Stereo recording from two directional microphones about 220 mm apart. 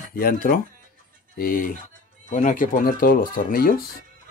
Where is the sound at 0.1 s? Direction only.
40° left (ahead or behind).